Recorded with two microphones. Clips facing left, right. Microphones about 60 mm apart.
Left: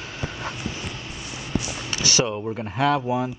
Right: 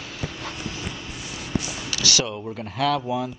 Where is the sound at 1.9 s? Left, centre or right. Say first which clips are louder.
Left 2 dB; left.